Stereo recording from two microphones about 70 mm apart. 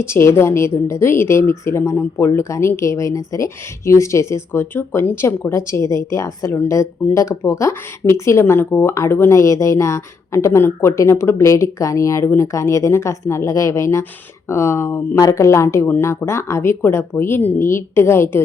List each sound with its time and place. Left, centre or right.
0.0 s a woman's voice: left
12.2 s a woman's voice: left
12.5 s a woman's voice: left